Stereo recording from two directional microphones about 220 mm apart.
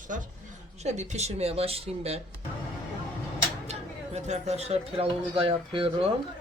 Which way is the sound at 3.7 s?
30° right (ahead or behind).